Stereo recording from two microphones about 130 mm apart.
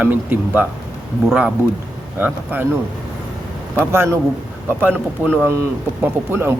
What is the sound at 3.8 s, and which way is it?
A man's voice, 20° right (ahead or behind).